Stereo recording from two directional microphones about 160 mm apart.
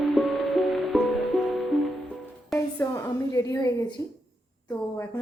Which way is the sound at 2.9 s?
20° left (ahead or behind).